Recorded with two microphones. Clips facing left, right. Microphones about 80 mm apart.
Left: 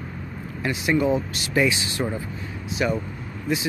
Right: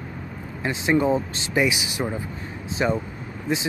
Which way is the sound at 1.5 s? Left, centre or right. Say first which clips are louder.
Left 1 dB; centre.